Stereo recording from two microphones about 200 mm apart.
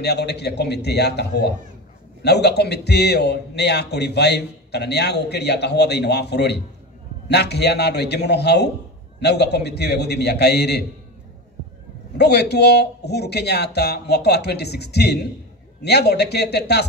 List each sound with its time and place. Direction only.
0.0 s a man's voice: 55° left (ahead or behind)
12.2 s a man's voice: 55° left (ahead or behind)